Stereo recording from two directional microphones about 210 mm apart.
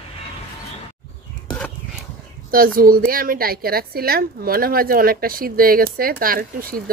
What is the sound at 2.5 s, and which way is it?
A woman's voice, 45° right (ahead or behind).